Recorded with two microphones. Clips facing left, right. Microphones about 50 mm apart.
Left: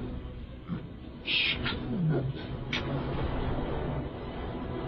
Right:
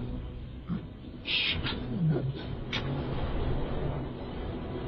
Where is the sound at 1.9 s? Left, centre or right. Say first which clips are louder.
Even; centre.